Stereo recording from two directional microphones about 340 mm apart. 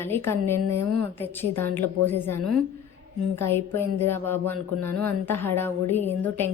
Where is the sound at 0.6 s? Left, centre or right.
Right.